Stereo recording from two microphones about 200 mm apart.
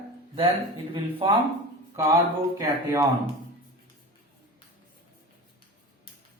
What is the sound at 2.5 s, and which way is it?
Speech, 15° right (ahead or behind).